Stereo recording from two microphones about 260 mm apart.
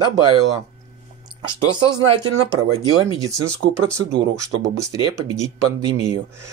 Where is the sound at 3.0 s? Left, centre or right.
Centre.